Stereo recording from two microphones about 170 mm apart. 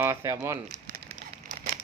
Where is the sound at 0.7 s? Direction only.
55° right (ahead or behind).